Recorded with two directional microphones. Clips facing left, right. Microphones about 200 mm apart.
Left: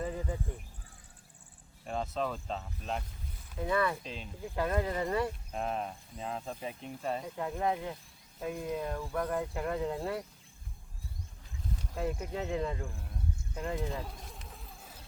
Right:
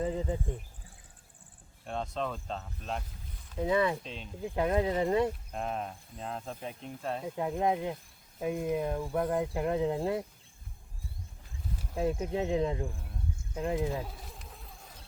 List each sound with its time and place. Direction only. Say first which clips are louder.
0.0 s speech: right 4 dB; 20° right (ahead or behind)
1.8 s speech: even; 5° left (ahead or behind)
3.6 s speech: right 3 dB; 20° right (ahead or behind)
4.0 s speech: even; centre (ahead or behind)
4.5 s speech: right 4 dB; 20° right (ahead or behind)
5.5 s speech: even; centre (ahead or behind)
7.3 s speech: right 6 dB; 20° right (ahead or behind)
11.9 s speech: right 5 dB; 20° right (ahead or behind)
14.1 s vehicle: even; centre (ahead or behind)